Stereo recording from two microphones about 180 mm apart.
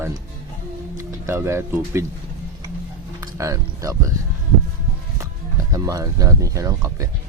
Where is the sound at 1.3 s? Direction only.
15° right (ahead or behind).